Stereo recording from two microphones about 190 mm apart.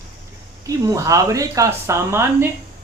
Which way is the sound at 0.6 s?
20° right (ahead or behind).